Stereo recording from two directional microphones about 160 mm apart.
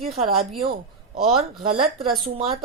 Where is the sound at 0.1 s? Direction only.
Centre (ahead or behind).